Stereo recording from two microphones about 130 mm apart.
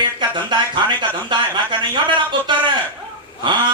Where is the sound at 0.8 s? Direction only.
35° right (ahead or behind).